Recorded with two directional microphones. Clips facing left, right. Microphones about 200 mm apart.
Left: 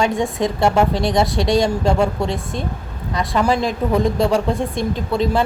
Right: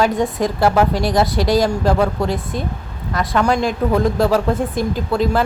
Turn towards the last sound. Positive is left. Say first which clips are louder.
# right 1 dB
turn(degrees=0)  # may be behind; listen again after turning